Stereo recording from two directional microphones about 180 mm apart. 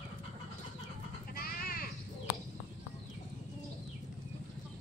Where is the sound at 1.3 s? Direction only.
55° left (ahead or behind).